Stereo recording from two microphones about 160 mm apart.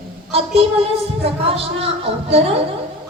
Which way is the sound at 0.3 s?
40° right (ahead or behind).